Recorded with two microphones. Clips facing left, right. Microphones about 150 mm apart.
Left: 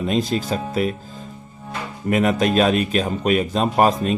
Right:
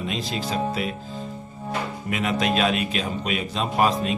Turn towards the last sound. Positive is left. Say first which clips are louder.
# left 4 dB
turn(degrees=45)  # may be behind; listen again after turning